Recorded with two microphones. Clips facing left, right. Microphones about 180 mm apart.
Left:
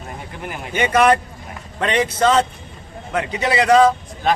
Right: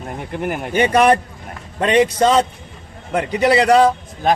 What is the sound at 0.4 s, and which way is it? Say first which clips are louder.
Speech: right 4 dB; 55° right (ahead or behind).